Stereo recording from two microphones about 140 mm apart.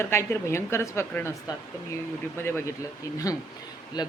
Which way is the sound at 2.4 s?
15° left (ahead or behind).